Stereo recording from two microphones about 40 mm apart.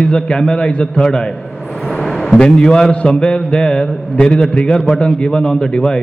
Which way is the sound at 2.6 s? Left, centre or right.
Centre.